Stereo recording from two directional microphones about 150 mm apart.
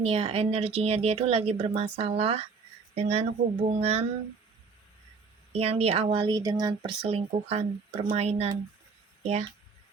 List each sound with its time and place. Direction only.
0.0 s speech: 40° right (ahead or behind)
5.5 s speech: 40° right (ahead or behind)
6.3 s speech: 25° right (ahead or behind); by 9.5 s 45° right (ahead or behind)